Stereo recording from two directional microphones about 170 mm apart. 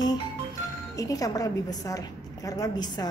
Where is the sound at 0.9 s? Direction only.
20° left (ahead or behind).